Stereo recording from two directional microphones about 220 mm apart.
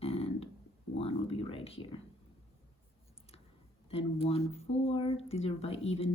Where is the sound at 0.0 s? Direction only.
25° left (ahead or behind).